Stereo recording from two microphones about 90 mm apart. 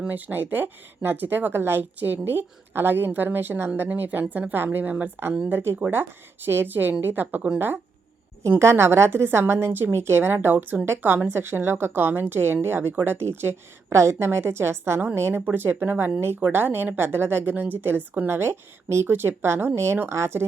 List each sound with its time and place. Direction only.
0.0 s speech: 20° right (ahead or behind)